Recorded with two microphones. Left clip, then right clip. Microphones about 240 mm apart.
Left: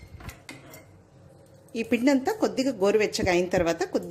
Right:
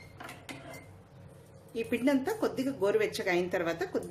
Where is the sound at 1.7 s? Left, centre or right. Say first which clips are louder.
Left 6 dB; left.